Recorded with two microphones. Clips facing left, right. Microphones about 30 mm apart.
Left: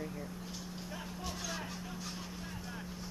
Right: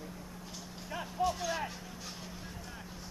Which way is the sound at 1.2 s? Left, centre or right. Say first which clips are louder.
Right 11 dB; centre.